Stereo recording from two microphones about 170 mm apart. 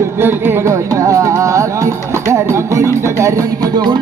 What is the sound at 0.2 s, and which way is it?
Music, 10° right (ahead or behind).